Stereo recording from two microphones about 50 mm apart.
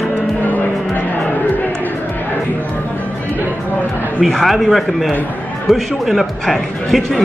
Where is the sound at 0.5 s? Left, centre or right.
Left.